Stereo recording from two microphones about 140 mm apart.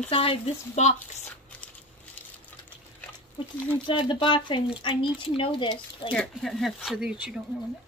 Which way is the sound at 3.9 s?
35° left (ahead or behind).